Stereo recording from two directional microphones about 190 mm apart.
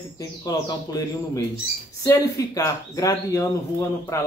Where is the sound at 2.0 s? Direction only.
20° left (ahead or behind).